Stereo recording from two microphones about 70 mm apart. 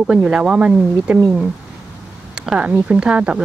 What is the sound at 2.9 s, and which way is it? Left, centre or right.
Speech, centre.